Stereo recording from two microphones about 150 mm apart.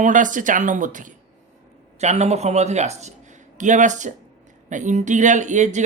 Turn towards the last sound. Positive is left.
turn(degrees=-50)  # may be behind; listen again after turning